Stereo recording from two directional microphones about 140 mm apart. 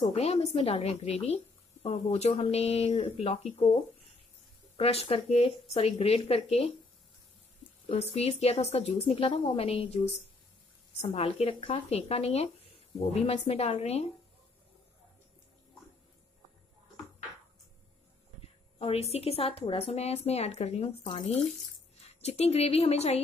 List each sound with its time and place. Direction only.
0.1 s a woman's voice: 50° left (ahead or behind)
4.7 s a woman's voice: 45° left (ahead or behind)
7.9 s a woman's voice: 50° left (ahead or behind)
11.1 s a woman's voice: 45° left (ahead or behind)
18.8 s a woman's voice: 45° left (ahead or behind)